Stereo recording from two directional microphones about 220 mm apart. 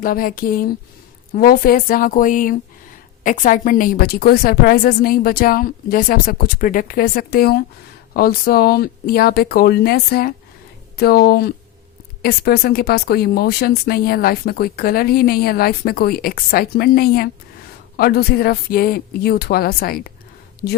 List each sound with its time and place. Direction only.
0.0 s a woman's voice: 40° left (ahead or behind)